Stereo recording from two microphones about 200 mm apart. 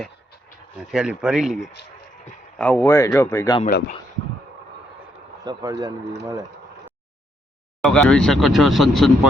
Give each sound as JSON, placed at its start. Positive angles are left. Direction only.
{"t": 0.9, "sound": "speech", "side_deg": -5}
{"t": 2.6, "sound": "speech", "side_deg": 5}
{"t": 3.7, "sound": "speech", "side_deg": 45}
{"t": 5.4, "sound": "speech", "side_deg": -20}
{"t": 7.8, "sound": "speech", "side_deg": 5}